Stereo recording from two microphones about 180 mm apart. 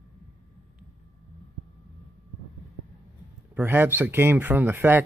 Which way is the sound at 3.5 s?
10° right (ahead or behind).